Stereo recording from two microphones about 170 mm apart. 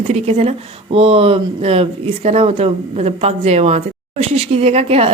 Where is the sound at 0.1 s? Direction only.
40° right (ahead or behind).